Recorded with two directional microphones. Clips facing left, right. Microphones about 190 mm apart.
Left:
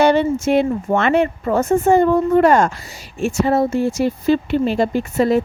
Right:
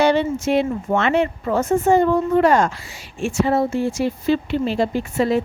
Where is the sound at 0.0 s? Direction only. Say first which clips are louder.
Left 3 dB; 50° left (ahead or behind).